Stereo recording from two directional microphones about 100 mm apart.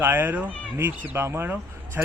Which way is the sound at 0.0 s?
20° right (ahead or behind).